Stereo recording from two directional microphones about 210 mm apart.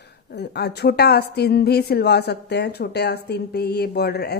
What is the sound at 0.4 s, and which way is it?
A woman's voice, 50° left (ahead or behind).